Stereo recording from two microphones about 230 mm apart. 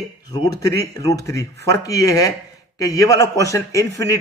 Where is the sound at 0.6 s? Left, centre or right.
Centre.